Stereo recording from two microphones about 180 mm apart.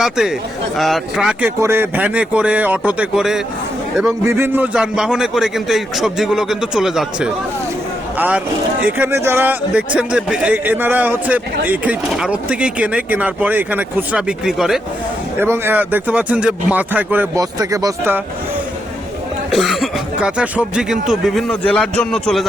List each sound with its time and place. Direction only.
0.0 s speech: 5° right (ahead or behind)
8.8 s speech: 10° right (ahead or behind)
15.4 s speech: 15° right (ahead or behind)
19.5 s speech: centre (ahead or behind)